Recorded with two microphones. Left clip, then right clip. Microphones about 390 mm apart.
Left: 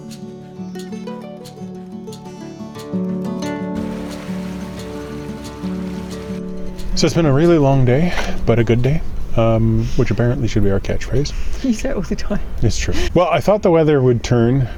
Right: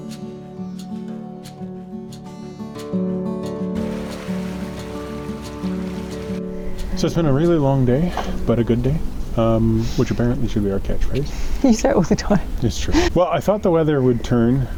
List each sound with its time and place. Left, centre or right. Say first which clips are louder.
2.9 s music: even; centre
6.9 s speech: left 4 dB; left
10.2 s speech: left 3 dB; left
11.7 s speech: right 5 dB; right
12.6 s speech: left 3 dB; left
12.9 s speech: right 5 dB; right
13.1 s speech: left 7 dB; left